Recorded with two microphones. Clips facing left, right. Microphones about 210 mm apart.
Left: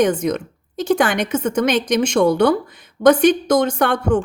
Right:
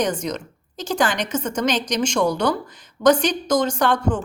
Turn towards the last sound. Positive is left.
turn(degrees=65)  # may be behind; listen again after turning